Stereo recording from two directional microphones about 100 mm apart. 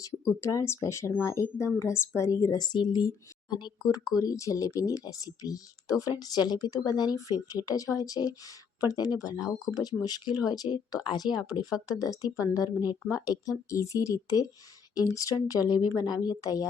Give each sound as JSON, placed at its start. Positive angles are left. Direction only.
{"t": 0.3, "sound": "speech", "side_deg": 30}
{"t": 4.1, "sound": "speech", "side_deg": 40}